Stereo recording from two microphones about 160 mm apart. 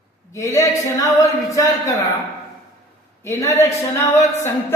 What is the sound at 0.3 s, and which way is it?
Speech, 20° left (ahead or behind).